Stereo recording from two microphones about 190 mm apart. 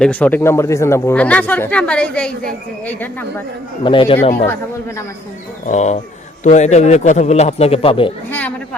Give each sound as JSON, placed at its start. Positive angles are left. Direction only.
{"t": 0.0, "sound": "speech", "side_deg": 5}
{"t": 3.8, "sound": "a man's voice", "side_deg": 25}
{"t": 5.6, "sound": "a man's voice", "side_deg": 35}
{"t": 8.3, "sound": "a sound", "side_deg": 10}